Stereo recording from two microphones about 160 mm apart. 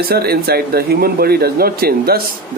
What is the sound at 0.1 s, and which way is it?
Speech, 75° right (ahead or behind).